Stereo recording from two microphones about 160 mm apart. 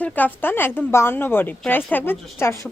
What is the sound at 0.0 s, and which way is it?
A woman's voice, 10° left (ahead or behind).